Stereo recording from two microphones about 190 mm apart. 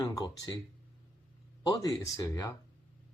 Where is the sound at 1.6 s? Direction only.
20° left (ahead or behind).